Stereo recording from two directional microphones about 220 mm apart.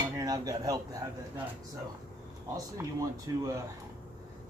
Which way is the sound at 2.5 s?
15° right (ahead or behind).